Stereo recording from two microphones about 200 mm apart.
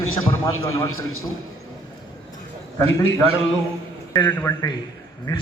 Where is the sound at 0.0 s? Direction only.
90° left.